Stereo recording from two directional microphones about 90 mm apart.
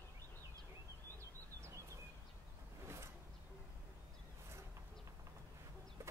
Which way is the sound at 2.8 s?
30° right (ahead or behind).